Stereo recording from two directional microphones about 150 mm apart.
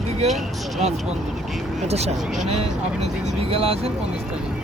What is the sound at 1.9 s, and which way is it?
Speech, 45° right (ahead or behind).